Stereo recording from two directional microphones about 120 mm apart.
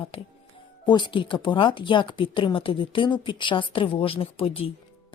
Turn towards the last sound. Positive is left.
turn(degrees=50)  # may be behind; listen again after turning